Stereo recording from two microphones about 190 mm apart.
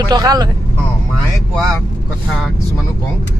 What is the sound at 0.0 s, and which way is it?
Speech, 20° right (ahead or behind).